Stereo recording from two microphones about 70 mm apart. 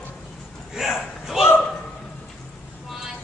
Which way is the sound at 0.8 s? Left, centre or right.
Centre.